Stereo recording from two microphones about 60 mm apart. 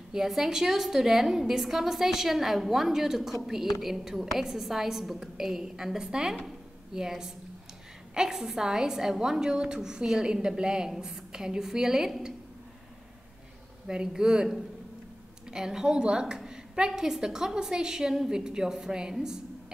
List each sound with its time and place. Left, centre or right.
0.1 s a woman's voice: centre
13.8 s a woman's voice: centre